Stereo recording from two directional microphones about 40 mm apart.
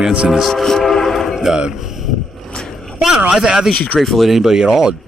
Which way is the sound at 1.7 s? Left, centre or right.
Centre.